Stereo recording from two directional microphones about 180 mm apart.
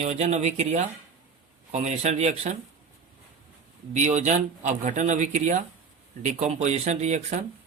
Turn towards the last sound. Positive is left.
turn(degrees=-40)  # may be behind; listen again after turning